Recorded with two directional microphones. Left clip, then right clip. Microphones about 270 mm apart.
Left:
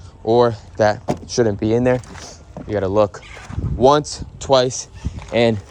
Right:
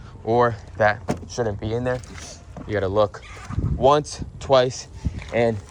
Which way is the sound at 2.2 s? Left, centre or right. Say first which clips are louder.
Left 4 dB; centre.